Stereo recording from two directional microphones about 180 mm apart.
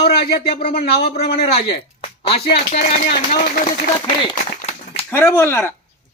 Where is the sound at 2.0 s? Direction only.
30° left (ahead or behind).